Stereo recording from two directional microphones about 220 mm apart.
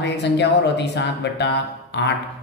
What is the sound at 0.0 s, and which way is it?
Speech, 50° left (ahead or behind).